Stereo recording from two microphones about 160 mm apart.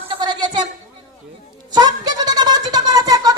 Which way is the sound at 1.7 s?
25° right (ahead or behind).